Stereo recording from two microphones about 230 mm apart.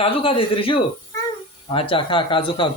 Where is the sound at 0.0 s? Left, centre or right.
Left.